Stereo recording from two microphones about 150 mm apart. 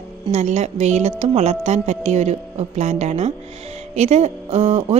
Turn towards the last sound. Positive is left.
turn(degrees=-45)  # may be behind; listen again after turning